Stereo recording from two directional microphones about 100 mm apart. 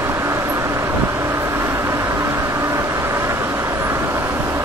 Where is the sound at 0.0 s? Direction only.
30° right (ahead or behind).